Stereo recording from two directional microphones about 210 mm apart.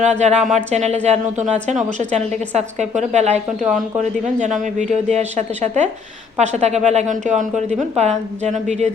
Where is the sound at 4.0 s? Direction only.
35° right (ahead or behind).